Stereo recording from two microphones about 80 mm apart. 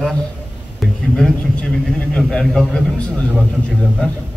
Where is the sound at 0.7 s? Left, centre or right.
Centre.